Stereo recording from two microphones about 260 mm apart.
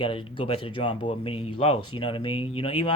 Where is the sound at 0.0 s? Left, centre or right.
Centre.